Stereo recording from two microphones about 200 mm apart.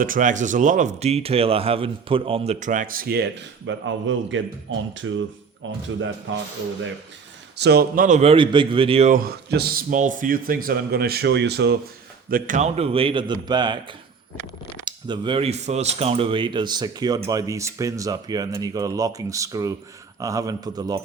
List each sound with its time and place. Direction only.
0.0 s speech: 40° right (ahead or behind)
3.7 s a man's voice: 70° right (ahead or behind)
7.5 s speech: 55° right (ahead or behind); by 9.1 s 30° right (ahead or behind)
9.1 s speech: 50° right (ahead or behind)
12.3 s speech: 40° right (ahead or behind); by 21.0 s 20° right (ahead or behind)